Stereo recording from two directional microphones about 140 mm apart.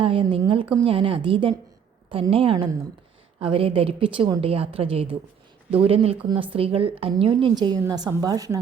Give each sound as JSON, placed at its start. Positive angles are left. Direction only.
{"t": 0.0, "sound": "a woman's voice", "side_deg": -40}